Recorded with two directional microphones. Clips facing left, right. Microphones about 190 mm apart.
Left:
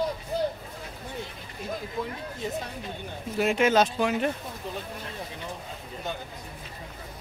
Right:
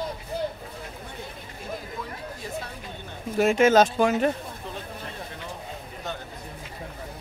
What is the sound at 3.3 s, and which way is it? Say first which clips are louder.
Speech: right 4 dB; 45° right (ahead or behind).